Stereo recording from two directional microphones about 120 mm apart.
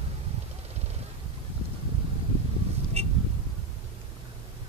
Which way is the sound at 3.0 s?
60° right (ahead or behind).